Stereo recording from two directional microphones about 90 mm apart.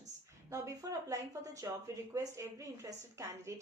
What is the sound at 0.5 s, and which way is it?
A woman's voice, 40° right (ahead or behind).